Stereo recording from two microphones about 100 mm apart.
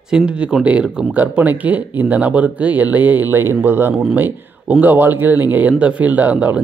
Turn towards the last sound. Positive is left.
turn(degrees=-15)  # may be behind; listen again after turning